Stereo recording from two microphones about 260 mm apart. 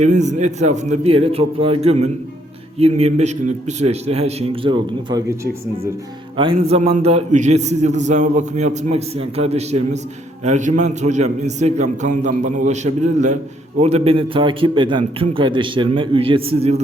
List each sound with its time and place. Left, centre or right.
0.0 s a man's voice: right
6.3 s a man's voice: centre